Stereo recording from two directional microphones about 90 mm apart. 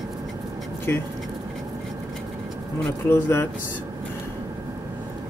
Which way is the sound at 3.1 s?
25° left (ahead or behind).